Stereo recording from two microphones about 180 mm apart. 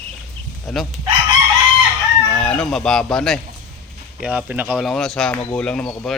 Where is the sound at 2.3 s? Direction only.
5° left (ahead or behind).